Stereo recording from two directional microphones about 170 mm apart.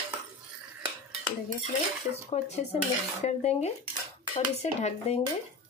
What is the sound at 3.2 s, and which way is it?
Speech, 40° left (ahead or behind).